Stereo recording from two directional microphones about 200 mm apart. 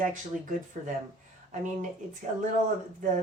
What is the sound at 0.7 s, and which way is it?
Speech, 40° right (ahead or behind).